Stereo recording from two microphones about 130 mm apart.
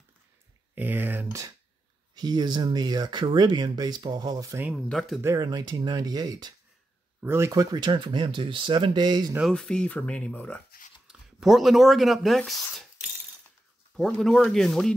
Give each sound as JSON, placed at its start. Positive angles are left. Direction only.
{"t": 0.7, "sound": "speech", "side_deg": -15}
{"t": 2.1, "sound": "speech", "side_deg": -35}
{"t": 4.7, "sound": "speech", "side_deg": 0}
{"t": 5.2, "sound": "speech", "side_deg": -25}
{"t": 7.2, "sound": "speech", "side_deg": -20}
{"t": 7.7, "sound": "speech", "side_deg": -35}
{"t": 9.4, "sound": "speech", "side_deg": 5}
{"t": 11.1, "sound": "speech", "side_deg": -5}
{"t": 13.9, "sound": "speech", "side_deg": 5}